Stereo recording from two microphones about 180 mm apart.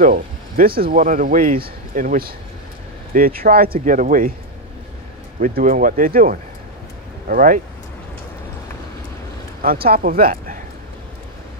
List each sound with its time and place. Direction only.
0.0 s speech: 55° right (ahead or behind)
5.4 s speech: 50° right (ahead or behind)
9.6 s speech: 55° right (ahead or behind)